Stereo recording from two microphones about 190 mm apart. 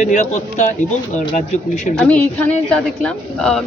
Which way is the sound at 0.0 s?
40° left (ahead or behind).